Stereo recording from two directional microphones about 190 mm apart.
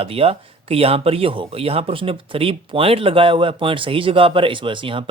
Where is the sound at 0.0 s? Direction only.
30° right (ahead or behind).